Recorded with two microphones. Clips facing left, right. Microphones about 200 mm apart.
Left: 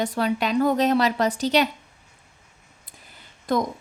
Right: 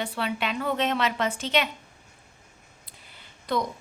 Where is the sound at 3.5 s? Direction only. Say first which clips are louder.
Left 4 dB; 45° left (ahead or behind).